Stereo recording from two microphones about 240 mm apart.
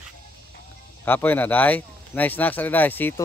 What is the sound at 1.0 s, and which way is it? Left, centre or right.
Speech, centre.